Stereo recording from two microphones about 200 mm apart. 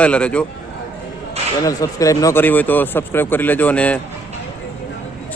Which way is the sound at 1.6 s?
15° left (ahead or behind).